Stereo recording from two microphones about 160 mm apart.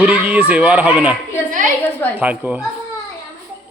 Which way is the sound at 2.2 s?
10° right (ahead or behind).